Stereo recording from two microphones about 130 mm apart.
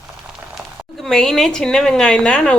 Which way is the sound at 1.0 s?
Centre (ahead or behind).